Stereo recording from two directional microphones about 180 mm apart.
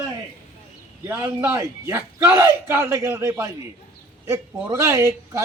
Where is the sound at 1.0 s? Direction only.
15° right (ahead or behind).